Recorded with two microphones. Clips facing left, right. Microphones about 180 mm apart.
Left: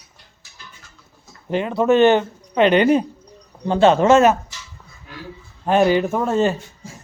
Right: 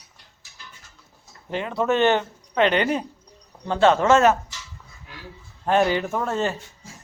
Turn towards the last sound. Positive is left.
turn(degrees=15)  # may be behind; listen again after turning